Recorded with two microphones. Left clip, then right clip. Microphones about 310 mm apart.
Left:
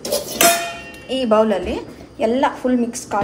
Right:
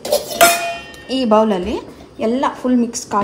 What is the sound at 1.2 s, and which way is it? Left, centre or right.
A woman's voice, right.